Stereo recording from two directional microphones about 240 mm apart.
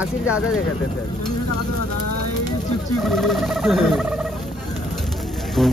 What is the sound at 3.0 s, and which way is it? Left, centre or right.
Speech, centre.